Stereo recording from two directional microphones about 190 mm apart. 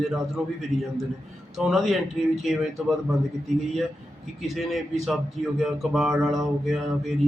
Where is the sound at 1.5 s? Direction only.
Centre (ahead or behind).